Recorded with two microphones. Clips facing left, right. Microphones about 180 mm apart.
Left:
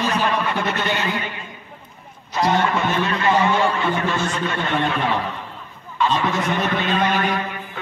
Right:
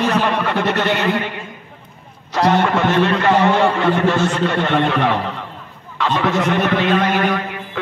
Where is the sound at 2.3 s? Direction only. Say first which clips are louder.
Right 4 dB; 70° right (ahead or behind).